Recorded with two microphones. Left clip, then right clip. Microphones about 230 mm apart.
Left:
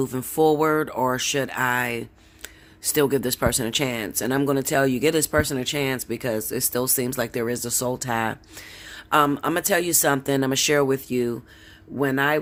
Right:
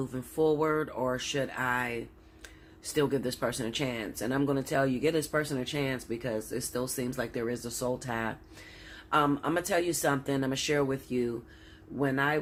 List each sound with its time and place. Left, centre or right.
0.0 s speech: left